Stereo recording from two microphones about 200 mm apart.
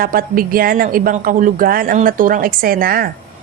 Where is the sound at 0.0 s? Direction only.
45° right (ahead or behind).